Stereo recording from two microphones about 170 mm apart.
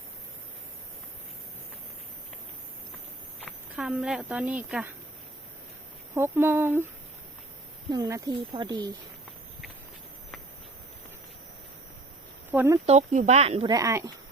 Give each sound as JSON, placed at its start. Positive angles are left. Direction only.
{"t": 3.4, "sound": "speech", "side_deg": 0}
{"t": 6.1, "sound": "speech", "side_deg": -15}
{"t": 7.9, "sound": "speech", "side_deg": -20}
{"t": 12.5, "sound": "speech", "side_deg": -15}
{"t": 12.8, "sound": "speech", "side_deg": -40}
{"t": 13.7, "sound": "speech", "side_deg": -20}